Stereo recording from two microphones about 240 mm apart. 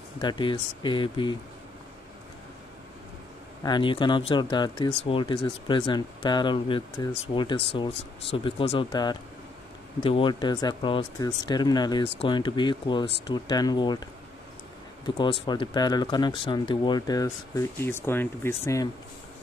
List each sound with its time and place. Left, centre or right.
0.2 s speech: centre
3.6 s speech: centre
15.0 s speech: centre